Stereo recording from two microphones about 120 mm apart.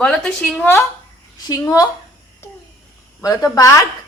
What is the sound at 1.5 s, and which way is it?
Speech, 30° left (ahead or behind).